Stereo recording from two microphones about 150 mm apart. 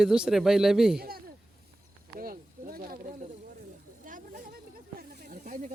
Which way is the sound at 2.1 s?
75° right (ahead or behind).